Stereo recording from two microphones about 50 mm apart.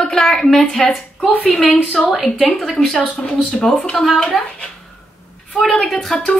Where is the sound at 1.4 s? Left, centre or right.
Right.